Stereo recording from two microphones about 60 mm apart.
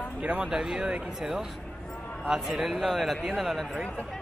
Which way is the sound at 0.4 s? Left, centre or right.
Centre.